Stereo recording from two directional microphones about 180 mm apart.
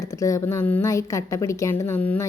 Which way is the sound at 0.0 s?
15° left (ahead or behind).